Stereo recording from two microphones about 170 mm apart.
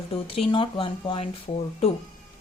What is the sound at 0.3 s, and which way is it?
Speech, 30° left (ahead or behind).